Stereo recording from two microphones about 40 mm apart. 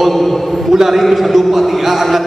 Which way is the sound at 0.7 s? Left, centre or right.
Centre.